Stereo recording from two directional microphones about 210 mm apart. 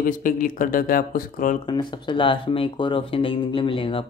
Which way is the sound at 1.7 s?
20° left (ahead or behind).